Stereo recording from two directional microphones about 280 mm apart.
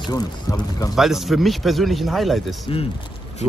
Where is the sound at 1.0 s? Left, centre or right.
Centre.